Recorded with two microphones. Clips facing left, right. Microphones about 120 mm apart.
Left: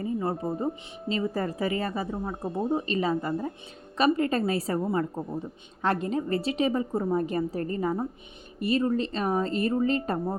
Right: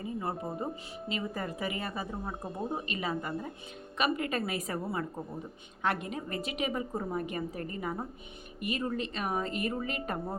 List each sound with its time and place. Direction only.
0.0 s a woman's voice: 30° left (ahead or behind)
2.2 s a woman's voice: 25° left (ahead or behind)